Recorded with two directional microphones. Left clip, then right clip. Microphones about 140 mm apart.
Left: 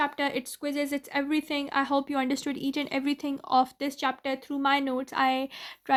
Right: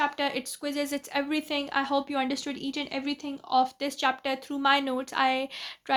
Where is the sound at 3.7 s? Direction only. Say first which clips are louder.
Right 2 dB; 30° left (ahead or behind).